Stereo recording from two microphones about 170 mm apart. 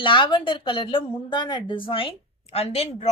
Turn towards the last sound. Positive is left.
turn(degrees=35)  # may be behind; listen again after turning